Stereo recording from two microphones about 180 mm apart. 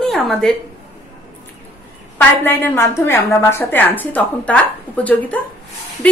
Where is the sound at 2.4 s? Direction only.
10° left (ahead or behind).